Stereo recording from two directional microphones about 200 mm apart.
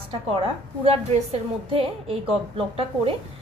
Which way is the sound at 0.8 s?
30° right (ahead or behind).